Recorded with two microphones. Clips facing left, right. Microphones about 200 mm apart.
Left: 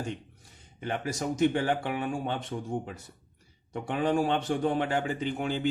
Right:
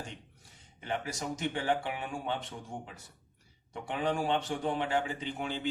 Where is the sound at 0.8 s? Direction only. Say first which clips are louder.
Left 4 dB; 45° left (ahead or behind).